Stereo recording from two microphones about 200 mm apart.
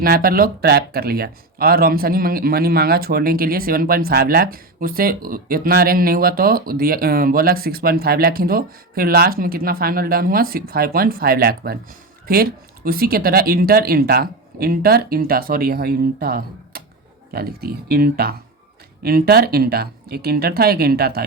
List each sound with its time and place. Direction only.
0.0 s speech: 45° right (ahead or behind)